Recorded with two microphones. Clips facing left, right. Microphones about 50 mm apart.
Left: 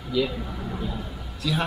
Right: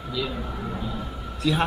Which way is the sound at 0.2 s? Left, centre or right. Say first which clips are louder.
Left 5 dB; centre.